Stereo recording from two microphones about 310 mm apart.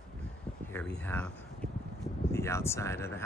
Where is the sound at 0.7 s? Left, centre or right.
Centre.